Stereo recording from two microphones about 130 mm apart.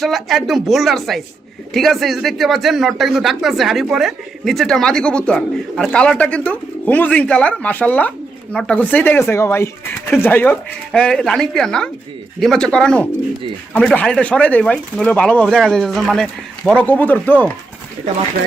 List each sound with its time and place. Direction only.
0.0 s speech: centre (ahead or behind)